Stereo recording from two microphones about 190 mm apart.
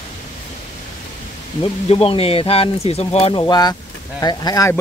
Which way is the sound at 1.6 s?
30° left (ahead or behind).